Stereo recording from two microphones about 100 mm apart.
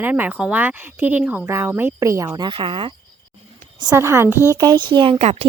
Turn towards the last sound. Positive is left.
turn(degrees=-90)